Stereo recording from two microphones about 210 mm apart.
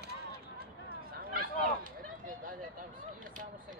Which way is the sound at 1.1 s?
45° right (ahead or behind).